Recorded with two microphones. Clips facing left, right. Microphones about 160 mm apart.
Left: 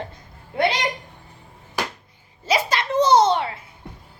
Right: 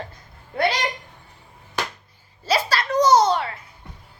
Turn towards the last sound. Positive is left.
turn(degrees=25)  # may be behind; listen again after turning